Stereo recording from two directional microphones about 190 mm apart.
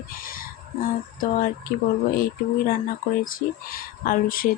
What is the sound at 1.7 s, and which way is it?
Speech, 50° left (ahead or behind).